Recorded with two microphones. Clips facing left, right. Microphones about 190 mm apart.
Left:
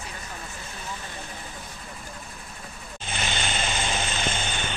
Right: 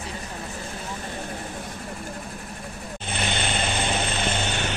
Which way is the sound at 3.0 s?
55° right (ahead or behind).